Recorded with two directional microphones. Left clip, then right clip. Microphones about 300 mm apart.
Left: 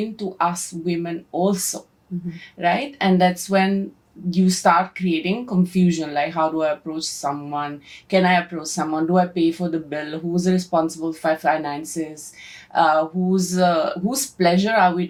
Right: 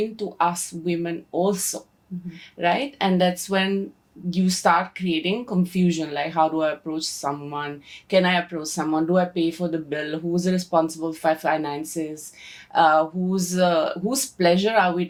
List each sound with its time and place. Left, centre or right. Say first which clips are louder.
0.2 s a woman's voice: left 3 dB; right